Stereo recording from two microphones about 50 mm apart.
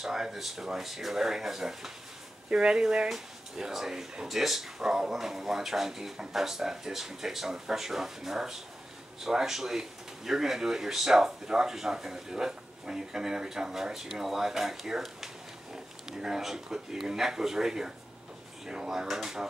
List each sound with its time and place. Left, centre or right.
0.0 s speech: centre
2.5 s speech: centre